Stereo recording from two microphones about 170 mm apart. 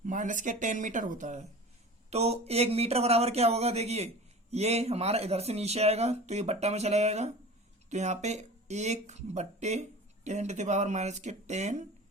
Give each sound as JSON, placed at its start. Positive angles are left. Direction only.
{"t": 0.0, "sound": "speech", "side_deg": -50}